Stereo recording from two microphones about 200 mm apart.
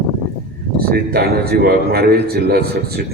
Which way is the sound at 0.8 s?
50° right (ahead or behind).